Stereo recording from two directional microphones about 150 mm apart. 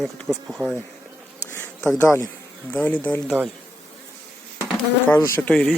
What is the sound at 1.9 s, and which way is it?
Speech, 20° left (ahead or behind).